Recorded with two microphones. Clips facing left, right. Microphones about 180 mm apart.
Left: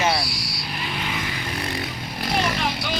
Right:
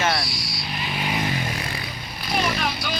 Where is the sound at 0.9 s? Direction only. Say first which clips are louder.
Right 4 dB; 15° right (ahead or behind).